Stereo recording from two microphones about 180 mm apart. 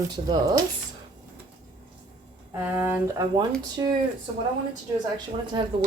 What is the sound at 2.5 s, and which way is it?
Speech, 10° right (ahead or behind).